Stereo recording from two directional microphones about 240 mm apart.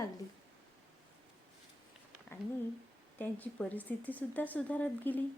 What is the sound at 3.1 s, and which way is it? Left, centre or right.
Speech, centre.